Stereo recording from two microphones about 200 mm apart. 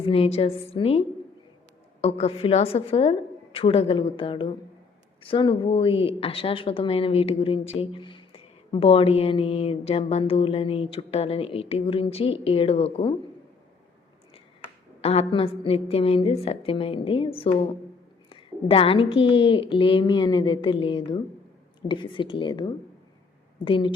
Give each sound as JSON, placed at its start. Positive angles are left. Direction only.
{"t": 0.0, "sound": "speech", "side_deg": 30}
{"t": 15.0, "sound": "speech", "side_deg": 30}
{"t": 18.3, "sound": "a sound", "side_deg": 25}
{"t": 19.1, "sound": "speech", "side_deg": 25}